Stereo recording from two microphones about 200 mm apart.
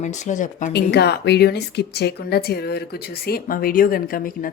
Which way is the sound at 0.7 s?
55° left (ahead or behind).